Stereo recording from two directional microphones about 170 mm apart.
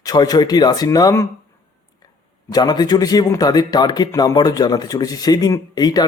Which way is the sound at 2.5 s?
25° left (ahead or behind).